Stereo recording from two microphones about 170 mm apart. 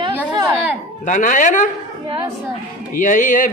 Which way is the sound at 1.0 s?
50° left (ahead or behind).